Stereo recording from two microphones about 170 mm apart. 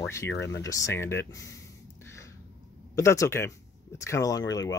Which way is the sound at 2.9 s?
20° left (ahead or behind).